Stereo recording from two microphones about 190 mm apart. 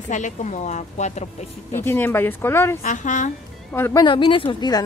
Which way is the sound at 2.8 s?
40° left (ahead or behind).